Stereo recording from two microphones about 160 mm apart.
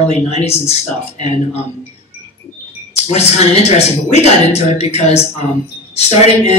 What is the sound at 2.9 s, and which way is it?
Speech, 40° left (ahead or behind).